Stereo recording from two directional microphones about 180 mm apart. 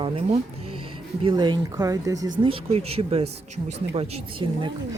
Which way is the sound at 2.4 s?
35° right (ahead or behind).